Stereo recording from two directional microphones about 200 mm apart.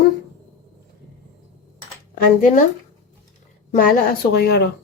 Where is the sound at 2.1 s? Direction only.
40° left (ahead or behind).